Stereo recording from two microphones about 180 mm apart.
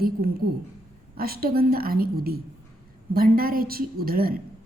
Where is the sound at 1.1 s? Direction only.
55° right (ahead or behind).